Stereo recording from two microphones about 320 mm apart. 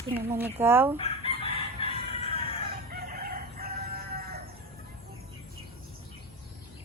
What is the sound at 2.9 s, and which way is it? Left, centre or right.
Chicken, right.